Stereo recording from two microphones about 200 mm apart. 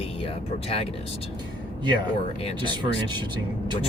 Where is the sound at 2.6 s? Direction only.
25° right (ahead or behind).